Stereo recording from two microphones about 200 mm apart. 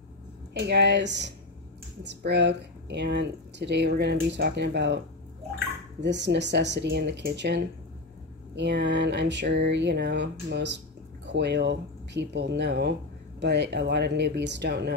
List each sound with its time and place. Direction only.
0.6 s speech: 60° right (ahead or behind)